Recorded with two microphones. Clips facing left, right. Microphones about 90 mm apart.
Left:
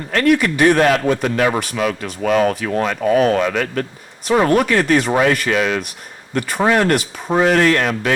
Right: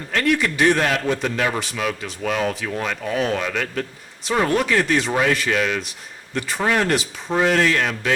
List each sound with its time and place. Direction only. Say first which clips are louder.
0.1 s a man's voice: left 5 dB; 55° left (ahead or behind)